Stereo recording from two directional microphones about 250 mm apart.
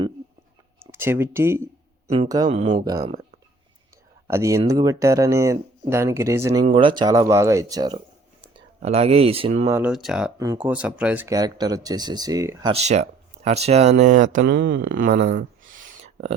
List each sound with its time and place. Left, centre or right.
0.8 s speech: centre
2.0 s speech: right
4.3 s speech: centre
9.6 s speech: centre
12.7 s speech: right
14.0 s a sound: right
14.5 s speech: right
15.8 s a sound: right